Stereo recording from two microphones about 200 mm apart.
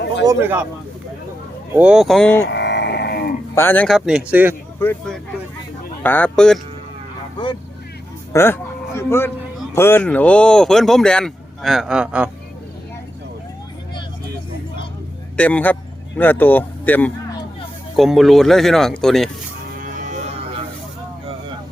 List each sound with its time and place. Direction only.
0.3 s speech: 10° right (ahead or behind)
1.7 s speech: 5° right (ahead or behind)
2.5 s livestock: 60° left (ahead or behind)
3.5 s speech: 10° left (ahead or behind); by 4.5 s 10° right (ahead or behind)
4.8 s a man's voice: 5° left (ahead or behind)
8.3 s a sound: 10° left (ahead or behind)
9.7 s speech: 10° left (ahead or behind); by 12.3 s 5° right (ahead or behind)
15.4 s speech: 5° left (ahead or behind)
19.8 s music: 40° right (ahead or behind)